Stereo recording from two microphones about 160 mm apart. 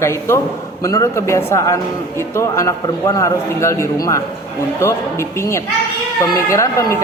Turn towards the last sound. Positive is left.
turn(degrees=20)  # may be behind; listen again after turning